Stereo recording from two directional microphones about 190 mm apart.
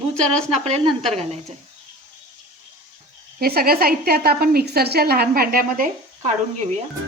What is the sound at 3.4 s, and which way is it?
A woman's voice, 55° right (ahead or behind).